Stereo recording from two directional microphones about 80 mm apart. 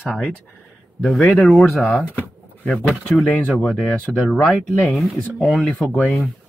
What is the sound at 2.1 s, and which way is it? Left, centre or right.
Drawer open or close, centre.